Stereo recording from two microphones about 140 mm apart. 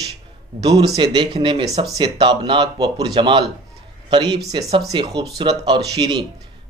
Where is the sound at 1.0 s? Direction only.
35° right (ahead or behind).